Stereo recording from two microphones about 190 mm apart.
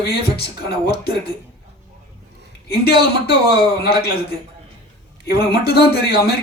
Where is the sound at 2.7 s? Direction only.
55° left (ahead or behind).